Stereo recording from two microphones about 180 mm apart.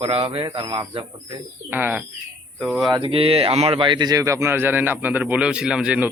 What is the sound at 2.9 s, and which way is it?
Speech, 30° right (ahead or behind).